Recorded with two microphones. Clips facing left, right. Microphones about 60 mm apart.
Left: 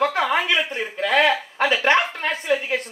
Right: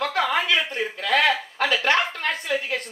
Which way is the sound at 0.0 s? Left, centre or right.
Left.